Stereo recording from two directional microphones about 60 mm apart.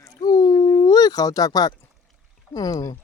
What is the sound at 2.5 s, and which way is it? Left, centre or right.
Speech, left.